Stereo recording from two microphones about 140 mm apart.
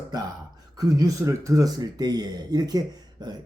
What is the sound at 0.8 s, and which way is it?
Speech, 25° right (ahead or behind).